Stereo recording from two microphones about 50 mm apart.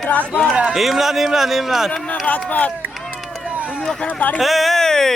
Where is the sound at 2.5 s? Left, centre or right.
Left.